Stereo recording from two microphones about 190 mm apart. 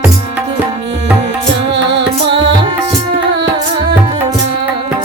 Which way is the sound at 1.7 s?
65° right (ahead or behind).